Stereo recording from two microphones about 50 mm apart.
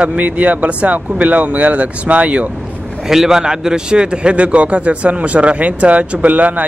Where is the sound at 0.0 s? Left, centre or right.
Right.